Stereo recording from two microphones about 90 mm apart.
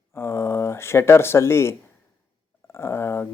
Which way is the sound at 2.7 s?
30° left (ahead or behind).